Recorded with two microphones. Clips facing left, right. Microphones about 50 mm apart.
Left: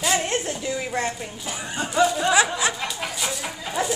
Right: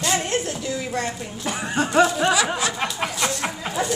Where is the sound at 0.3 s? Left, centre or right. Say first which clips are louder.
Right 1 dB; centre.